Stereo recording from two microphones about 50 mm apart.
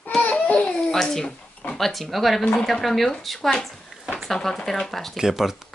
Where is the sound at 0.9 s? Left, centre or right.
Centre.